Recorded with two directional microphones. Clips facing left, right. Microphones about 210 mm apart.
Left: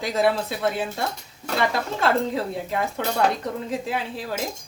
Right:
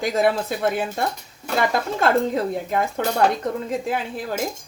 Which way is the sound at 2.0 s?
45° right (ahead or behind).